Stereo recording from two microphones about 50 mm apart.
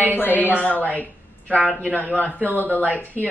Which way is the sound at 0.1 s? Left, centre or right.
Left.